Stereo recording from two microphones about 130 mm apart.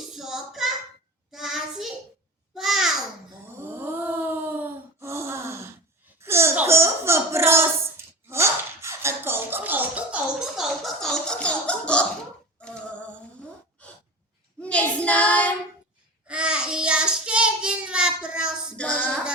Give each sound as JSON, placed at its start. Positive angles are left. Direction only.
{"t": 0.1, "sound": "child singing", "side_deg": -5}
{"t": 2.6, "sound": "babbling", "side_deg": 0}
{"t": 3.6, "sound": "a sound", "side_deg": -15}
{"t": 8.3, "sound": "music", "side_deg": -20}
{"t": 10.6, "sound": "music", "side_deg": 0}
{"t": 12.6, "sound": "female singing", "side_deg": 5}
{"t": 13.8, "sound": "a sound", "side_deg": 10}
{"t": 14.6, "sound": "child singing", "side_deg": 10}
{"t": 16.2, "sound": "child singing", "side_deg": -10}
{"t": 18.8, "sound": "a sound", "side_deg": 10}